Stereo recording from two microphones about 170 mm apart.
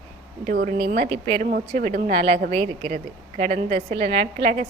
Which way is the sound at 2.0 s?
35° right (ahead or behind).